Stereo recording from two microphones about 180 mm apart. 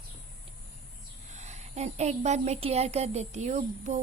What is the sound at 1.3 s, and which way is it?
Speech, 40° right (ahead or behind).